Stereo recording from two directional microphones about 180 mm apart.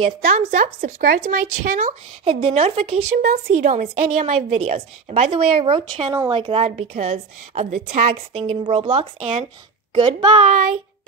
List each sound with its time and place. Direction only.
0.3 s speech: 45° right (ahead or behind)
2.2 s a woman's voice: 35° right (ahead or behind)
3.2 s a woman's voice: 45° right (ahead or behind); by 10.4 s 25° right (ahead or behind)